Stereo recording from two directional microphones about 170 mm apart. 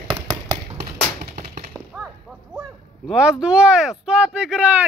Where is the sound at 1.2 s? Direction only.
55° right (ahead or behind).